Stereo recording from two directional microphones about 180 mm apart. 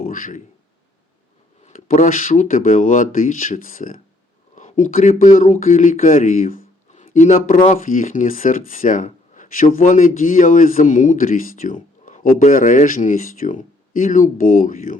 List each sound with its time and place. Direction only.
0.0 s speech: 45° left (ahead or behind)
1.6 s speech: 40° left (ahead or behind)